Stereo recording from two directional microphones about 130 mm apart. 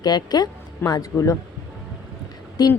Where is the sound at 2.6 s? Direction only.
30° left (ahead or behind).